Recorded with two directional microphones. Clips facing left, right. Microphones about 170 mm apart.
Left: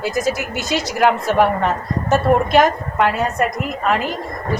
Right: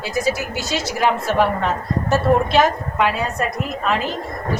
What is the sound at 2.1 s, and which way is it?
Speech, 15° left (ahead or behind).